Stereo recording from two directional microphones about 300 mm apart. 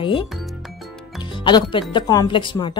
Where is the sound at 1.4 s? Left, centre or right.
Centre.